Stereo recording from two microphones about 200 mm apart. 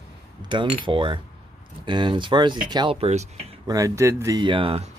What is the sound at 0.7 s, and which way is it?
Speech, 25° right (ahead or behind).